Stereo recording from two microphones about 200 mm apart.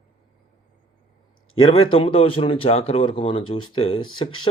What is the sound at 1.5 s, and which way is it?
Speech, 25° left (ahead or behind).